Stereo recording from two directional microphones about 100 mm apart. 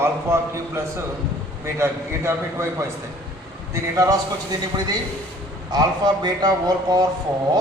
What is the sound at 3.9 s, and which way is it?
Speech, 35° right (ahead or behind).